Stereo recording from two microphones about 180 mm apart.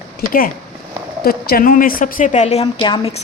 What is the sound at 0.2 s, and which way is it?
A woman's voice, 50° left (ahead or behind).